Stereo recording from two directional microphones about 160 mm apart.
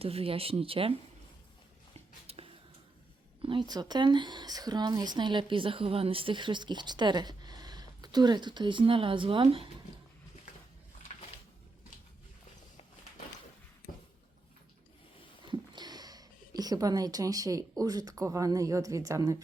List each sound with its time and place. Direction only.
0.0 s speech: 40° right (ahead or behind)
2.2 s a sound: 40° right (ahead or behind)
3.4 s speech: 30° right (ahead or behind)
15.4 s speech: 25° right (ahead or behind)